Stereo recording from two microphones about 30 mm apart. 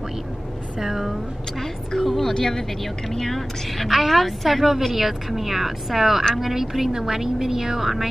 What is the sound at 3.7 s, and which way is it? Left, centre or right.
A woman's voice, centre.